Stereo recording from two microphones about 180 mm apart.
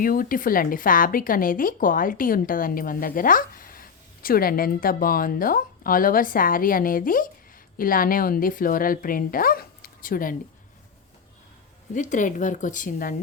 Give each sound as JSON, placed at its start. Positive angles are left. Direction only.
{"t": 0.0, "sound": "speech", "side_deg": 50}
{"t": 11.9, "sound": "speech", "side_deg": 45}